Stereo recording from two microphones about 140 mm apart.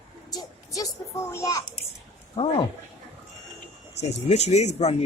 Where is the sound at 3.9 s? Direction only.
50° left (ahead or behind).